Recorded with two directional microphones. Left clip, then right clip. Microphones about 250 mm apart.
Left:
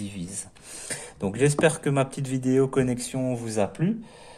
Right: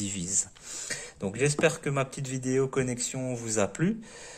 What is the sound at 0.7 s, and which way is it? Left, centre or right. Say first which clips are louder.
Speech: even; centre.